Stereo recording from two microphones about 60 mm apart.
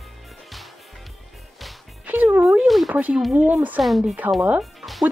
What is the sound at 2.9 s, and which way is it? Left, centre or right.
Speech, right.